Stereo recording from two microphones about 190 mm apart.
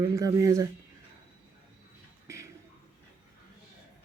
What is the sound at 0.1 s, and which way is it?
Speech, 15° right (ahead or behind).